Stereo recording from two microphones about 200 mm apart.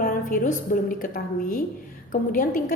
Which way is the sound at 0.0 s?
45° left (ahead or behind).